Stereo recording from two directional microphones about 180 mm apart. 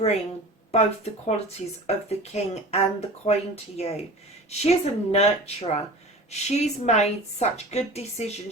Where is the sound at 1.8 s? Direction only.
35° left (ahead or behind).